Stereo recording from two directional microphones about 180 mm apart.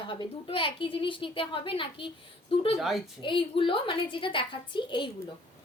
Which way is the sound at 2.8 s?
Centre (ahead or behind).